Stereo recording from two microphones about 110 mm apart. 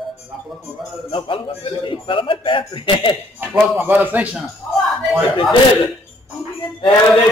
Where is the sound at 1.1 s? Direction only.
50° left (ahead or behind).